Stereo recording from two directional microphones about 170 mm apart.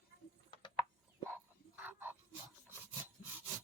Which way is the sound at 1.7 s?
10° right (ahead or behind).